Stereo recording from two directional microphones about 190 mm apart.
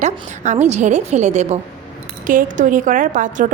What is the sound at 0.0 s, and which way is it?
A woman's voice, 40° right (ahead or behind).